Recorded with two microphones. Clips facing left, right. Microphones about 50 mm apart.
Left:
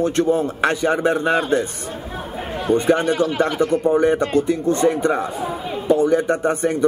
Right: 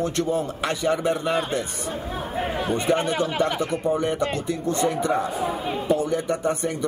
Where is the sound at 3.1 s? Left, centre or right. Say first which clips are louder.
Left 5 dB; centre.